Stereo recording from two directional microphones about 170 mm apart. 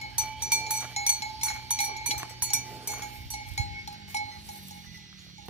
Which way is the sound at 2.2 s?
5° right (ahead or behind).